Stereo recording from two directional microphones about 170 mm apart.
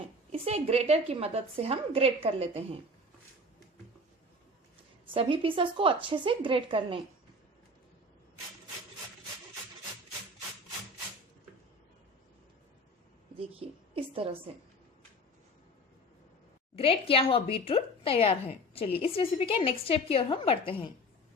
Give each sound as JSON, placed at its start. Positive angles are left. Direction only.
{"t": 0.3, "sound": "a woman's voice", "side_deg": -40}
{"t": 5.1, "sound": "a woman's voice", "side_deg": -30}
{"t": 13.4, "sound": "a woman's voice", "side_deg": -35}
{"t": 16.7, "sound": "a woman's voice", "side_deg": 35}